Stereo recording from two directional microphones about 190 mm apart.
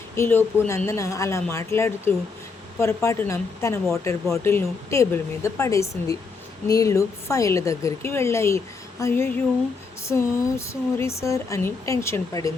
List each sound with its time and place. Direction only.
0.2 s a woman's voice: 15° left (ahead or behind)